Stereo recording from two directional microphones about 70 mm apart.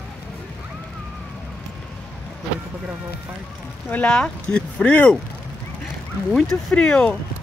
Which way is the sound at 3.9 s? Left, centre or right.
Centre.